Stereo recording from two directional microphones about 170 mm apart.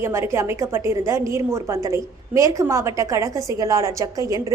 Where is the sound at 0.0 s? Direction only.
15° right (ahead or behind).